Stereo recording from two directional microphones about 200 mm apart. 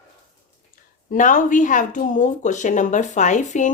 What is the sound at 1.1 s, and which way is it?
Speech, 40° left (ahead or behind).